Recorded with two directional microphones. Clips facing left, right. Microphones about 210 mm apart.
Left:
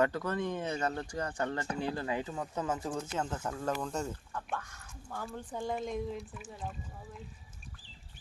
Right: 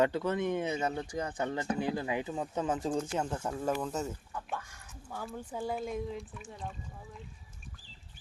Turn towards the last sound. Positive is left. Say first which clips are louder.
# left 1 dB
turn(degrees=5)  # may be behind; listen again after turning